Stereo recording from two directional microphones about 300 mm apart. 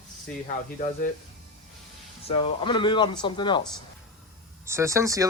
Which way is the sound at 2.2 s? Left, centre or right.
Centre.